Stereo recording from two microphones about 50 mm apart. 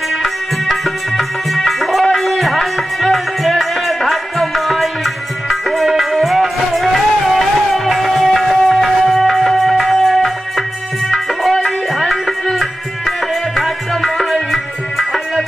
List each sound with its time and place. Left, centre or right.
0.2 s music: centre